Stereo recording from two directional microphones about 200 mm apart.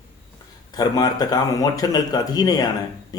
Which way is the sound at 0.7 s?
20° left (ahead or behind).